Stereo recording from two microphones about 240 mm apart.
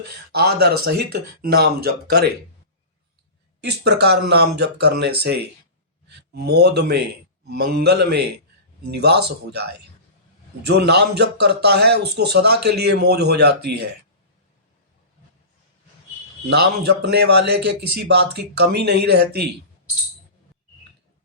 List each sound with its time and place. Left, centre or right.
0.3 s speech: right
3.6 s a man's voice: right
16.5 s a man's voice: right